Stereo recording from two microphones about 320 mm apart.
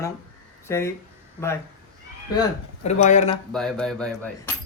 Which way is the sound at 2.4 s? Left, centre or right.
Centre.